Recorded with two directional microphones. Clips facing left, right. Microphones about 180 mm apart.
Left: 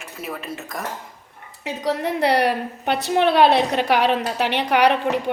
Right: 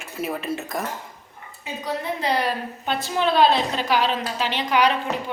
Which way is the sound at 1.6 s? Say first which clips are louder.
Left 5 dB; 80° left.